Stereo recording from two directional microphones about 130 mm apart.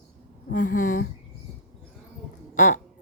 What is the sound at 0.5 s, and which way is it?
Speech, 90° left.